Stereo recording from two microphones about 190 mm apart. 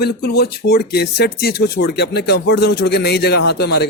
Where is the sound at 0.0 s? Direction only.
55° left (ahead or behind).